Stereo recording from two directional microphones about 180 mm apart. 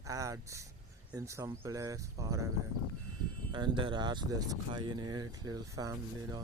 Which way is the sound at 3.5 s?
25° right (ahead or behind).